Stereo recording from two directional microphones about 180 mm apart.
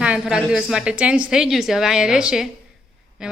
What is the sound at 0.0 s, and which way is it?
A woman's voice, 5° right (ahead or behind).